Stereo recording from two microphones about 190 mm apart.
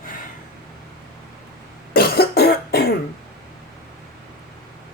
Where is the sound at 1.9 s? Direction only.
55° left (ahead or behind).